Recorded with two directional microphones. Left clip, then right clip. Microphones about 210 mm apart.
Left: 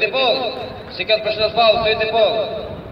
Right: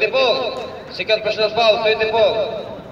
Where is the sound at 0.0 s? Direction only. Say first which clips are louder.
Right 1 dB; 35° right (ahead or behind).